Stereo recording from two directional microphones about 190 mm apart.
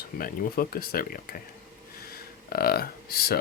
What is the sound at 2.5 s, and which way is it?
Speech, 55° left (ahead or behind).